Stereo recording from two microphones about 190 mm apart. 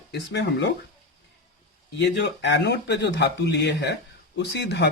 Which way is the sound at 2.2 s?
65° left (ahead or behind).